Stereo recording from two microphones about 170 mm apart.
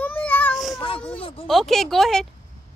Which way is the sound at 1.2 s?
35° left (ahead or behind).